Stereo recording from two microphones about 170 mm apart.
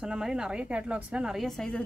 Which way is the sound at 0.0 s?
5° right (ahead or behind).